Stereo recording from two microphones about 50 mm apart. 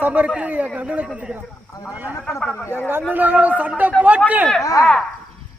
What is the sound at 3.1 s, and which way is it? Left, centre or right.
A man's voice, right.